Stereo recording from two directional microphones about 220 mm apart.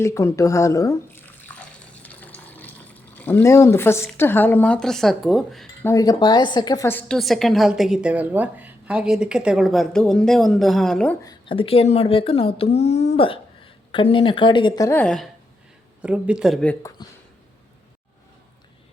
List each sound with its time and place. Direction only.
0.0 s speech: 10° left (ahead or behind)
5.9 s a woman's voice: 15° left (ahead or behind); by 16.7 s centre (ahead or behind)
17.0 s speech: 20° left (ahead or behind)